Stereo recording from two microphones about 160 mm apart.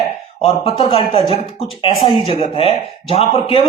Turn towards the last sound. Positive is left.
turn(degrees=35)  # may be behind; listen again after turning